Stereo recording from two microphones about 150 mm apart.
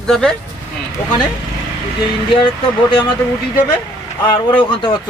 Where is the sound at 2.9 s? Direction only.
35° left (ahead or behind).